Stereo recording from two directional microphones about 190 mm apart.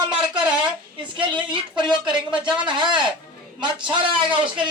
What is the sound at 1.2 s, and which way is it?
Speech, 25° right (ahead or behind).